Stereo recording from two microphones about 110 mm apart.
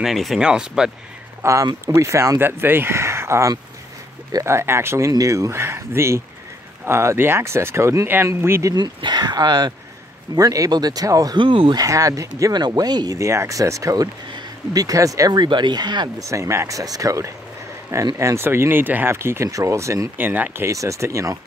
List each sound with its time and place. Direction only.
0.0 s speech: centre (ahead or behind)
1.4 s speech: 30° right (ahead or behind)
8.7 s speech: 40° right (ahead or behind)
11.4 s speech: 55° right (ahead or behind)
11.7 s speech: 30° right (ahead or behind)
16.2 s speech: 30° right (ahead or behind)
20.6 s speech: 30° right (ahead or behind)